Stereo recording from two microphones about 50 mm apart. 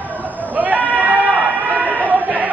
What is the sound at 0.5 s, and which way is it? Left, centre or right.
Sheep, right.